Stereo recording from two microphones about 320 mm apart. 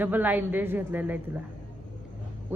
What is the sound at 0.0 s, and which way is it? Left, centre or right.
A woman's voice, centre.